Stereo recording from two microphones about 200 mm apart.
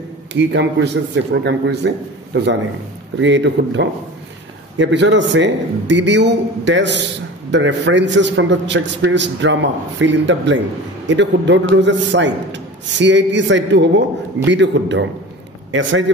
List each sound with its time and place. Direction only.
0.3 s a man's voice: 60° right (ahead or behind)
3.2 s a man's voice: 65° right (ahead or behind)